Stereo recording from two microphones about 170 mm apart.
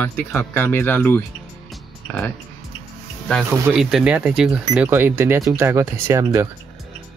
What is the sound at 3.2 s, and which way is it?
Speech, centre (ahead or behind).